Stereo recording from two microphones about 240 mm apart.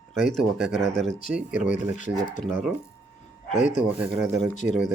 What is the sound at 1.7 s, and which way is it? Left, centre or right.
Speech, left.